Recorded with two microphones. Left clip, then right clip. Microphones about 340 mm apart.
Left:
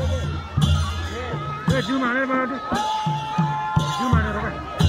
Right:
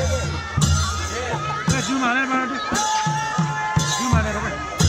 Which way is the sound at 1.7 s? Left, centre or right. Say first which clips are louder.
Even; centre.